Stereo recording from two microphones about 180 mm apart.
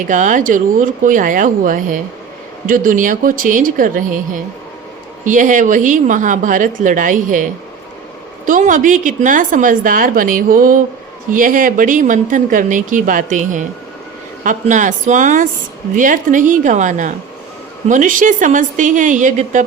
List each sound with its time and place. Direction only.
0.1 s a woman's voice: 45° right (ahead or behind)